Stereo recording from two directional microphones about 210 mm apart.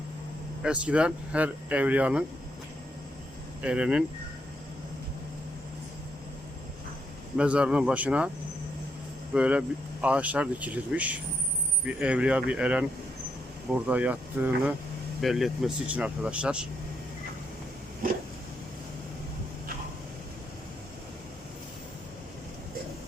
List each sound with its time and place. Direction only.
0.6 s speech: 5° right (ahead or behind)
3.6 s speech: 5° right (ahead or behind)
7.3 s speech: 5° right (ahead or behind)
9.3 s speech: 5° right (ahead or behind)
13.8 s speech: 5° right (ahead or behind)